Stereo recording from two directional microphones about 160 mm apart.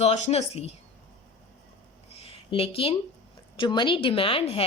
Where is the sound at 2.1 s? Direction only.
40° left (ahead or behind).